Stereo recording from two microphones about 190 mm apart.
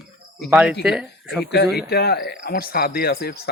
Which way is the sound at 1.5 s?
60° left (ahead or behind).